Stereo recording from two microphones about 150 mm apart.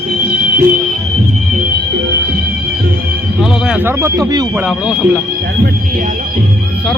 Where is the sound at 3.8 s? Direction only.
15° right (ahead or behind).